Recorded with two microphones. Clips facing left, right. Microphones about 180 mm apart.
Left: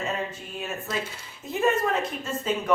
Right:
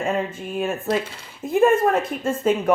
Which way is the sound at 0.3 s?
50° right (ahead or behind).